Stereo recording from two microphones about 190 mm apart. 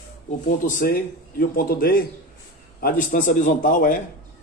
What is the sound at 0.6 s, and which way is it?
Speech, 45° left (ahead or behind).